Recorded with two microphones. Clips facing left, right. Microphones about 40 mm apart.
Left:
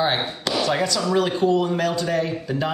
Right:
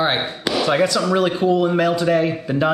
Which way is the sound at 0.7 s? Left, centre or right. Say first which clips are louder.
Right 6 dB; centre.